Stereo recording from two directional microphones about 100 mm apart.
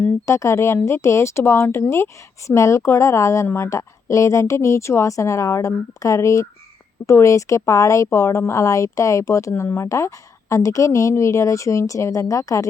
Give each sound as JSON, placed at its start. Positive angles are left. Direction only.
{"t": 0.0, "sound": "speech", "side_deg": 25}